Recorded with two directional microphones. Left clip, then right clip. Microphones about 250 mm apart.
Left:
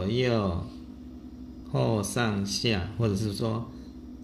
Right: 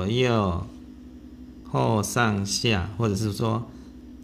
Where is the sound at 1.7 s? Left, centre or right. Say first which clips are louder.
Right 4 dB; right.